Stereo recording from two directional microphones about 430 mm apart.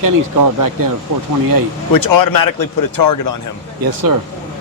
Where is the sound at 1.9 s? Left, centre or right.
Left.